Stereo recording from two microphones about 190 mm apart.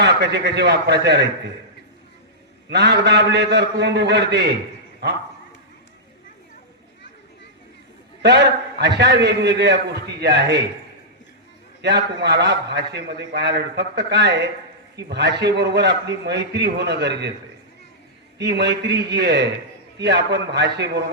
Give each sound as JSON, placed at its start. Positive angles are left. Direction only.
{"t": 0.0, "sound": "a man's voice", "side_deg": -65}
{"t": 2.6, "sound": "a man's voice", "side_deg": -60}
{"t": 8.2, "sound": "a man's voice", "side_deg": -60}
{"t": 11.8, "sound": "a man's voice", "side_deg": -60}
{"t": 18.3, "sound": "a man's voice", "side_deg": -65}